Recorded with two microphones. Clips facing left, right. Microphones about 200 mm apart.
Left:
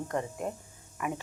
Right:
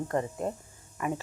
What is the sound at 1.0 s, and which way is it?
Speech, 5° left (ahead or behind).